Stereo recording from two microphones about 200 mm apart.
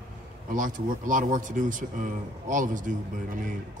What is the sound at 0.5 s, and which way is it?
A man's voice, 40° right (ahead or behind).